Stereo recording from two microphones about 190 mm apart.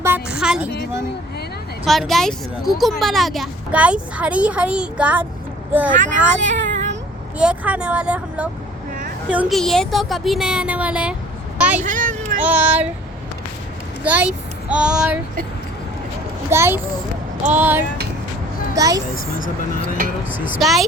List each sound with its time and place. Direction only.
0.0 s a sound: 10° right (ahead or behind)
1.8 s speech: centre (ahead or behind)
7.3 s speech: 5° right (ahead or behind)
11.5 s a sound: 5° right (ahead or behind)
11.8 s a sound: 45° right (ahead or behind)
12.4 s speech: 10° right (ahead or behind)
14.0 s a child's voice: 10° right (ahead or behind)
16.5 s speech: 10° right (ahead or behind)
19.1 s speech: 50° left (ahead or behind)
20.5 s speech: centre (ahead or behind)